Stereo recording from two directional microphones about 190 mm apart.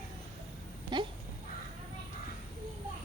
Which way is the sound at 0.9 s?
25° right (ahead or behind).